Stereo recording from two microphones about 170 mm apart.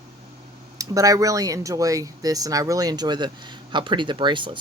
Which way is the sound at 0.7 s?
20° right (ahead or behind).